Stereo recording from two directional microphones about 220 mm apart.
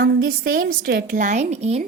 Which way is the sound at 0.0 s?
45° right (ahead or behind).